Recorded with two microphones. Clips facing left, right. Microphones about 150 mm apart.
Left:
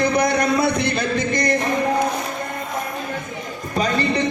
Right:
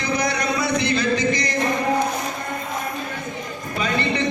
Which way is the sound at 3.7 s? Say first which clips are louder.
Left 3 dB; 40° left (ahead or behind).